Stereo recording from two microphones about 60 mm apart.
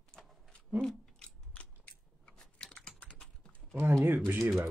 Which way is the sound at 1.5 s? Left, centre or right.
Left.